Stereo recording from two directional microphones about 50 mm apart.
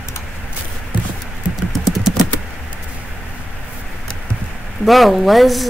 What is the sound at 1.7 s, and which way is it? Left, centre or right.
Typing, centre.